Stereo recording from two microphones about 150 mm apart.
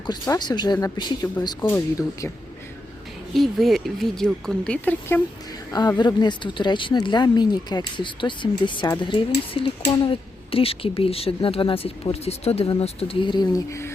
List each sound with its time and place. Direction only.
0.0 s speech: 30° left (ahead or behind)
3.3 s speech: centre (ahead or behind)
6.0 s speech: 30° left (ahead or behind)